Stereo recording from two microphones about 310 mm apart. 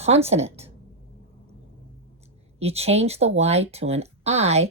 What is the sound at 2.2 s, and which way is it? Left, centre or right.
Speech, centre.